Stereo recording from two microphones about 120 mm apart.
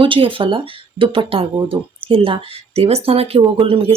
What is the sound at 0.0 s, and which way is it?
Speech, 45° right (ahead or behind).